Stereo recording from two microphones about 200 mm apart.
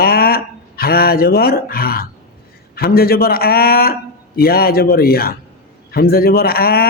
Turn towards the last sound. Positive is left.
turn(degrees=50)  # may be behind; listen again after turning